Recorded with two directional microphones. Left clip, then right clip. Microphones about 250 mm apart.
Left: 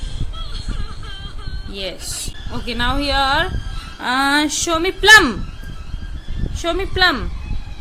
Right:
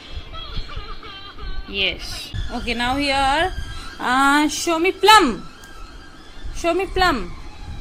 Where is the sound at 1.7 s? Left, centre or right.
Centre.